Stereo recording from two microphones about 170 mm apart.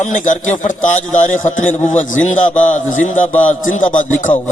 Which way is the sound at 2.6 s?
45° left (ahead or behind).